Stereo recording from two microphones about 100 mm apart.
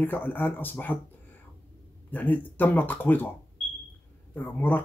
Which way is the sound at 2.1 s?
15° left (ahead or behind).